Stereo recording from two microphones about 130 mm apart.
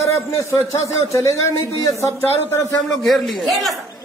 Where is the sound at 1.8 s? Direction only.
25° left (ahead or behind).